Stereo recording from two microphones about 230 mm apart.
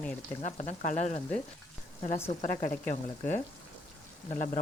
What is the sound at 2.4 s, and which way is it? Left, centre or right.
Speech, left.